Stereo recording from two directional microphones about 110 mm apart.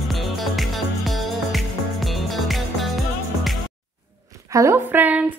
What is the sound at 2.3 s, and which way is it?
Music, centre (ahead or behind).